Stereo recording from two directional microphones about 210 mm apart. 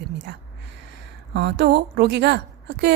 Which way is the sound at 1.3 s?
55° right (ahead or behind).